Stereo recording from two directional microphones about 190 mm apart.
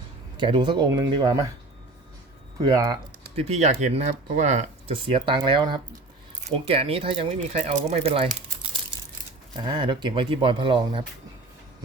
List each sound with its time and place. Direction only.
0.3 s speech: 25° right (ahead or behind)
2.6 s speech: 20° right (ahead or behind)
3.3 s speech: 35° right (ahead or behind)
9.6 s speech: 25° right (ahead or behind)